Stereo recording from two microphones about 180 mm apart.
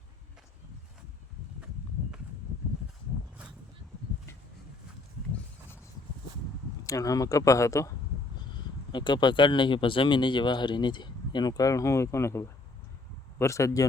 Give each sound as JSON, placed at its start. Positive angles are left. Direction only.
{"t": 6.8, "sound": "speech", "side_deg": 20}
{"t": 8.9, "sound": "speech", "side_deg": 25}